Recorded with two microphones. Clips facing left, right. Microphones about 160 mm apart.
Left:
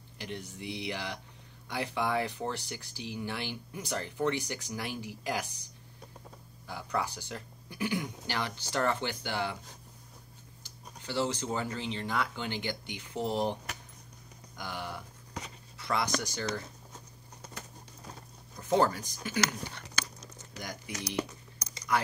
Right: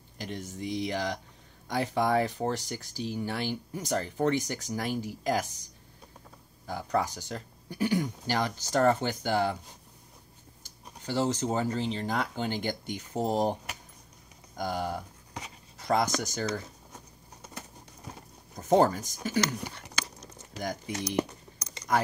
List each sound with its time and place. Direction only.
0.2 s speech: 45° right (ahead or behind)
6.6 s speech: 45° right (ahead or behind)
10.6 s speech: 45° right (ahead or behind)
18.6 s speech: 45° right (ahead or behind)